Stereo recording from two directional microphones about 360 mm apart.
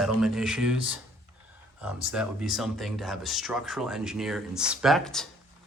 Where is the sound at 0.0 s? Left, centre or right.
Centre.